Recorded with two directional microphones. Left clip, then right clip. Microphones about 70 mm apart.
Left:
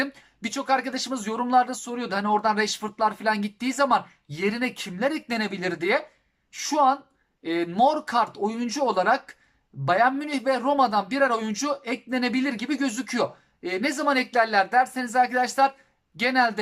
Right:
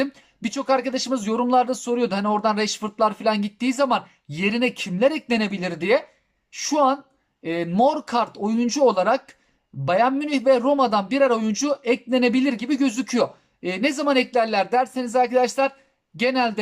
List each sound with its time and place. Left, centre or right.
0.0 s speech: right